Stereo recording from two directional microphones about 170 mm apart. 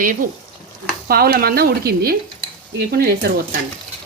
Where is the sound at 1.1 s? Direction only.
65° right (ahead or behind).